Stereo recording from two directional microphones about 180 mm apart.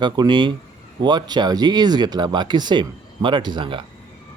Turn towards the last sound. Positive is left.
turn(degrees=-25)  # may be behind; listen again after turning